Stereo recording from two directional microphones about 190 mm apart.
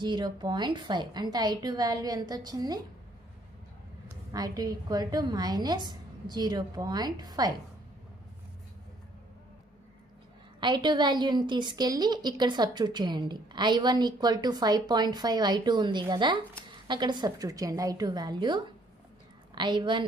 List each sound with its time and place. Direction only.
0.0 s a woman's voice: 25° right (ahead or behind)
4.3 s a woman's voice: 20° right (ahead or behind)
10.6 s a woman's voice: 25° right (ahead or behind)